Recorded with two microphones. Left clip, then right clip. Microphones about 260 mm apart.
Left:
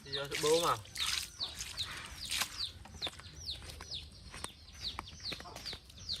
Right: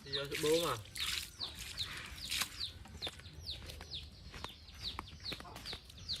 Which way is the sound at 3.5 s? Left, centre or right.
Right.